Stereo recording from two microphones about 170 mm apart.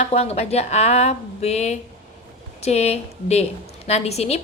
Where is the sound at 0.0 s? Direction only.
35° left (ahead or behind).